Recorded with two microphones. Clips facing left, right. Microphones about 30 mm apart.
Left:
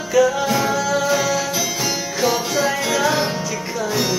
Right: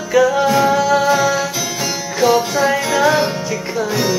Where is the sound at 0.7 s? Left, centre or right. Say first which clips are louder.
Right 5 dB; right.